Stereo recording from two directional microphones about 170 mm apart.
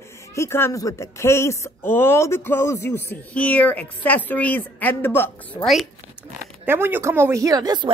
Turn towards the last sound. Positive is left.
turn(degrees=-25)  # may be behind; listen again after turning